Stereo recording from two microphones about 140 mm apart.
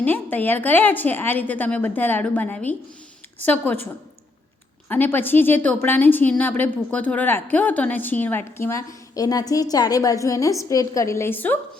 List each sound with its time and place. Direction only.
0.0 s a woman's voice: 15° left (ahead or behind)
4.9 s a woman's voice: 15° left (ahead or behind)